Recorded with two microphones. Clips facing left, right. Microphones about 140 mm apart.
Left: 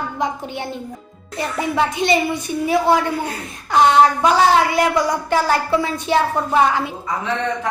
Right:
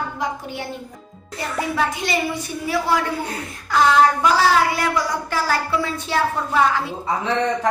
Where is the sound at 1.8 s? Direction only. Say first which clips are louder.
Left 6 dB; 20° left (ahead or behind).